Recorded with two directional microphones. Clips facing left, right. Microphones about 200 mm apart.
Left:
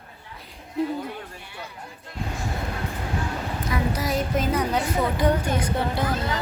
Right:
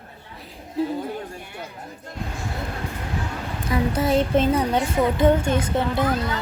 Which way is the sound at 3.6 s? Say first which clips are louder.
Right 5 dB; 30° right (ahead or behind).